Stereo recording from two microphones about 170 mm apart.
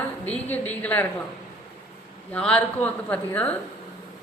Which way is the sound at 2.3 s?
5° left (ahead or behind).